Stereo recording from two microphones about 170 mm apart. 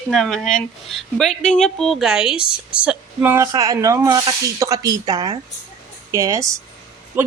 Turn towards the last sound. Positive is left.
turn(degrees=-10)  # may be behind; listen again after turning